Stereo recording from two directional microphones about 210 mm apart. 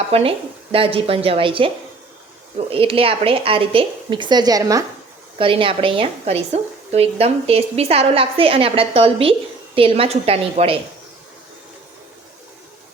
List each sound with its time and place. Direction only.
0.1 s a woman's voice: 25° right (ahead or behind)